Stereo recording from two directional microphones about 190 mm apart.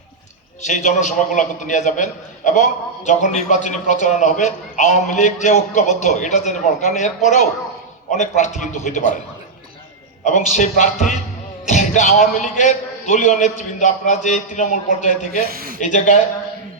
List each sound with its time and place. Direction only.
0.6 s a man's voice: 40° left (ahead or behind)
8.1 s a man's voice: 40° left (ahead or behind)
10.2 s a man's voice: 40° left (ahead or behind)
15.4 s speech: 50° right (ahead or behind)
15.8 s a man's voice: 40° left (ahead or behind)